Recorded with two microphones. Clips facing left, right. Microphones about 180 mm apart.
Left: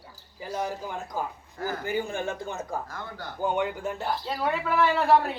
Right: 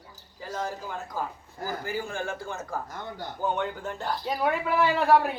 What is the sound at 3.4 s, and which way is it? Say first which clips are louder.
Speech: left 2 dB; 10° left (ahead or behind).